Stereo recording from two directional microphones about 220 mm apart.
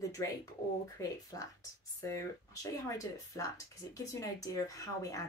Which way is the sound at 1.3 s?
15° left (ahead or behind).